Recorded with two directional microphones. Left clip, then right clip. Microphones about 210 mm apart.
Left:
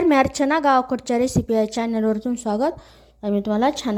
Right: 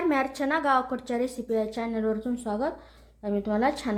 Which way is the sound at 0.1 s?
35° left (ahead or behind).